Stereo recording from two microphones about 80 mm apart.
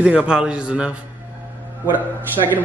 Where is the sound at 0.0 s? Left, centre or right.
Centre.